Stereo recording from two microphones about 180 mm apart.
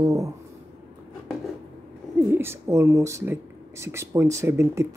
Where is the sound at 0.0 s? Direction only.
20° right (ahead or behind).